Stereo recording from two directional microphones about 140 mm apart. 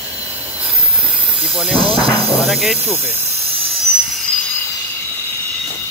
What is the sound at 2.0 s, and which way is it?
Speech, 45° right (ahead or behind).